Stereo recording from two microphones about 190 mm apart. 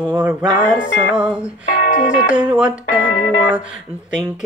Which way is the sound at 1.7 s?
45° left (ahead or behind).